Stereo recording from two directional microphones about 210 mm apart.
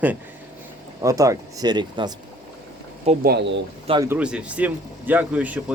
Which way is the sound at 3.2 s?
50° right (ahead or behind).